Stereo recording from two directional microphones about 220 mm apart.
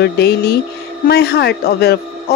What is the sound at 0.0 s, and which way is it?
Speech, 45° left (ahead or behind).